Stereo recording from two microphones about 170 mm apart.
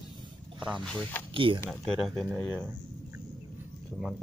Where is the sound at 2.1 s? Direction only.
Centre (ahead or behind).